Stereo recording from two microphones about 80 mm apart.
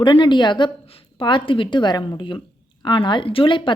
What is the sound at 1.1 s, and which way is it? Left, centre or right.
A woman's voice, left.